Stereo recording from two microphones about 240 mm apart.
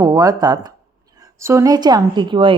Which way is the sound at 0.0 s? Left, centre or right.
Centre.